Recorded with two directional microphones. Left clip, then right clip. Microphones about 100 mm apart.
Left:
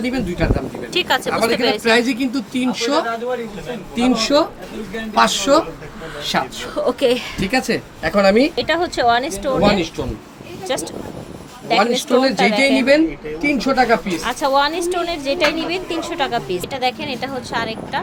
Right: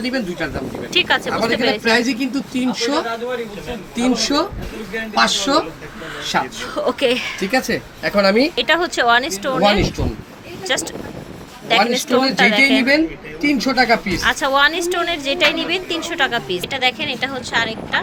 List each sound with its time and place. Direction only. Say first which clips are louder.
0.0 s a woman's voice: even; 10° left (ahead or behind)
0.9 s speech: right 2 dB; 30° left (ahead or behind)
1.5 s speech: even; 45° left (ahead or behind)
1.8 s a woman's voice: left 1 dB; 10° left (ahead or behind)
5.1 s speech: left 2 dB; 35° left (ahead or behind)
6.2 s a woman's voice: even; 15° left (ahead or behind)
7.4 s speech: even; centre (ahead or behind)
8.0 s speech: left 1 dB; 15° right (ahead or behind)
8.5 s speech: right 2 dB; centre (ahead or behind)
9.6 s a woman's voice: right 1 dB; 20° right (ahead or behind)
10.7 s speech: right 2 dB; centre (ahead or behind)
13.4 s speech: even; 10° right (ahead or behind)